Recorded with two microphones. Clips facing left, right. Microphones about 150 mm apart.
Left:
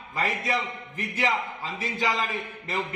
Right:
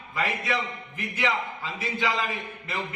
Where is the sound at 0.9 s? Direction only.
40° left (ahead or behind).